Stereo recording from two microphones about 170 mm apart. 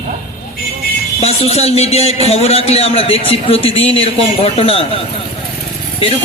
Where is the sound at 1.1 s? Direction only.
40° left (ahead or behind).